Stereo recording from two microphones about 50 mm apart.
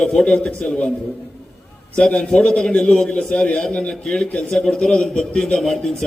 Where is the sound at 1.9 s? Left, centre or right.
Centre.